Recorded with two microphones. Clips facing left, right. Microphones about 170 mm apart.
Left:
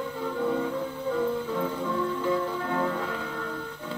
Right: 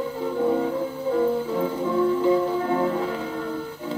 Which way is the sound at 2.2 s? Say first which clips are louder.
Right 7 dB; 25° right (ahead or behind).